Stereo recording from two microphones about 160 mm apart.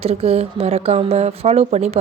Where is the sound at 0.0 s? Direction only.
40° right (ahead or behind).